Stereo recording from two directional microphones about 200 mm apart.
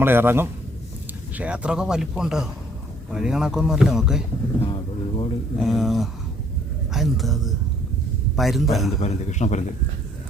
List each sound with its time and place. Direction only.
0.0 s a man's voice: 10° right (ahead or behind)
4.6 s speech: 25° left (ahead or behind)
5.5 s speech: centre (ahead or behind)
9.0 s a man's voice: 35° left (ahead or behind)